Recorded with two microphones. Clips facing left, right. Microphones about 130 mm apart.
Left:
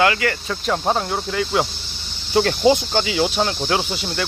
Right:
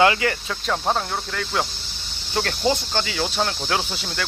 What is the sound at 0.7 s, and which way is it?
Cricket, 5° left (ahead or behind).